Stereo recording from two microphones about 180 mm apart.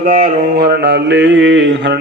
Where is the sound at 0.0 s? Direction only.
50° right (ahead or behind).